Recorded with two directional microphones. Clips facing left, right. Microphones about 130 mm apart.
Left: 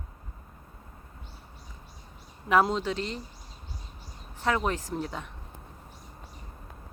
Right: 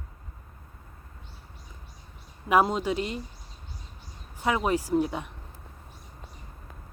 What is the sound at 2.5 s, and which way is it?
Speech, 10° right (ahead or behind).